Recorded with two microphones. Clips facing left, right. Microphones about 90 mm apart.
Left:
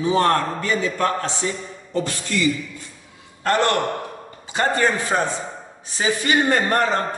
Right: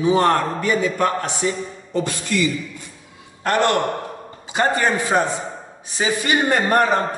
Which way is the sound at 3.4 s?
15° right (ahead or behind).